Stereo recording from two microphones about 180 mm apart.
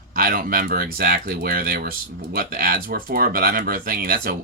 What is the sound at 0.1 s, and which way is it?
Speech, 55° right (ahead or behind).